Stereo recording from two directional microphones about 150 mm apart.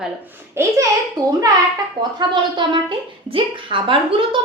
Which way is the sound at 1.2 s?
25° right (ahead or behind).